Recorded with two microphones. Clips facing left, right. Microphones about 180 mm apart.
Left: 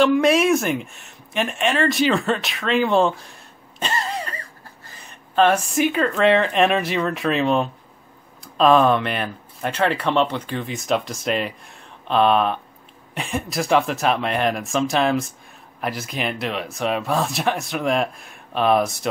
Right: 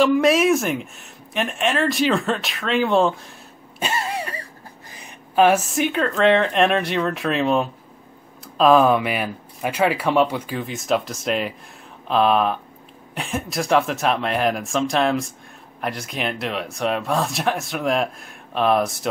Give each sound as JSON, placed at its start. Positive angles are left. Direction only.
{"t": 0.0, "sound": "speech", "side_deg": 0}